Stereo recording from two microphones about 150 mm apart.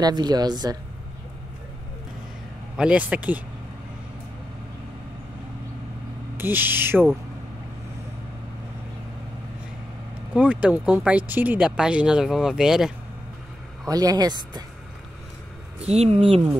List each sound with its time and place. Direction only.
0.0 s a woman's voice: 25° right (ahead or behind)
2.8 s speech: 10° right (ahead or behind)
6.3 s speech: 15° right (ahead or behind)
10.3 s speech: 10° right (ahead or behind)
13.8 s a woman's voice: 25° right (ahead or behind)
15.8 s speech: 45° right (ahead or behind)